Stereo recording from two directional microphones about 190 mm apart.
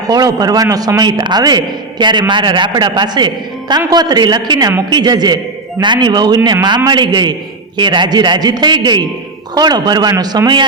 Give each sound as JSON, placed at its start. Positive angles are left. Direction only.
{"t": 0.1, "sound": "a man's voice", "side_deg": -20}